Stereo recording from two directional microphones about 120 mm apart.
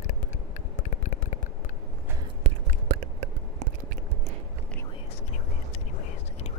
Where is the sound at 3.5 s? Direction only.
75° right (ahead or behind).